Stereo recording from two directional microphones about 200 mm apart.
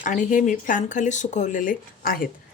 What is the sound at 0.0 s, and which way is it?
Speech, 40° left (ahead or behind).